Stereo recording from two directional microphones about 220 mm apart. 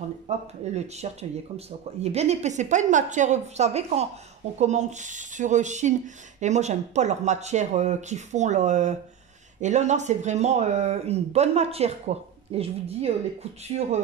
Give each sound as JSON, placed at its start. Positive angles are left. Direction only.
{"t": 0.3, "sound": "speech", "side_deg": -30}